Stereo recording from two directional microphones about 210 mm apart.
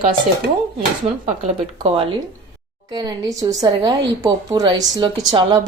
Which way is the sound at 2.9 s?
15° right (ahead or behind).